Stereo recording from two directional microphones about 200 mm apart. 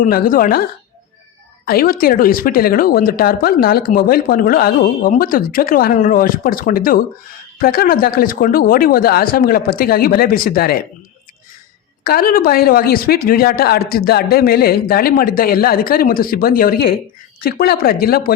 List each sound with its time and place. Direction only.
0.0 s speech: 45° left (ahead or behind)
1.6 s speech: 45° left (ahead or behind)
12.0 s speech: 45° left (ahead or behind)